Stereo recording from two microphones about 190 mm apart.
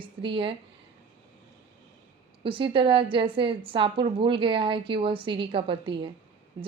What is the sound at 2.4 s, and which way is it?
Speech, 25° right (ahead or behind).